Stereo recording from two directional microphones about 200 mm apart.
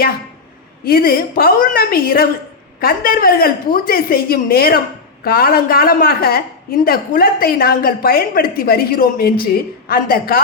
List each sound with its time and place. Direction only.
0.9 s a woman's voice: 50° left (ahead or behind)